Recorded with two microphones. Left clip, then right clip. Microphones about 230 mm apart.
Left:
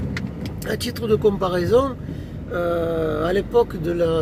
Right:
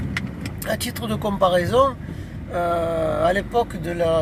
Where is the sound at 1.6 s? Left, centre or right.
Centre.